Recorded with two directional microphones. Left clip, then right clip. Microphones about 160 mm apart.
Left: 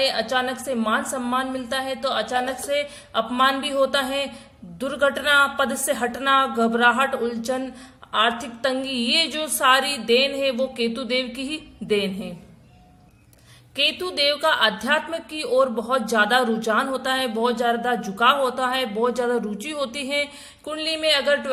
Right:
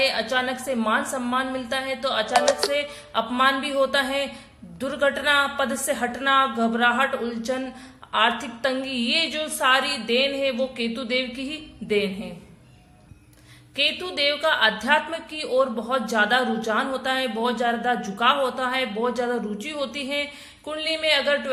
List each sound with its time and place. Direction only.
0.0 s a woman's voice: 30° left (ahead or behind)
13.7 s a woman's voice: 30° left (ahead or behind)